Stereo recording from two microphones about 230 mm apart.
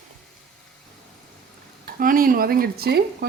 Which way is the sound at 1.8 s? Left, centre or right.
Right.